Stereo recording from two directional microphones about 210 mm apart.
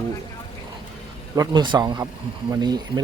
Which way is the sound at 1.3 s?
20° right (ahead or behind).